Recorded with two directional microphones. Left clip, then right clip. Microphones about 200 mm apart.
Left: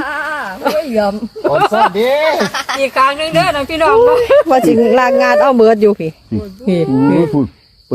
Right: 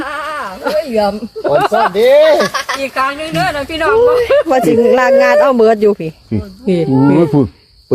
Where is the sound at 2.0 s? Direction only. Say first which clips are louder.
Right 5 dB; 15° right (ahead or behind).